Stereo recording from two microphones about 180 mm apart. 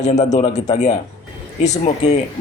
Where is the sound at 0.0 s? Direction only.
40° left (ahead or behind).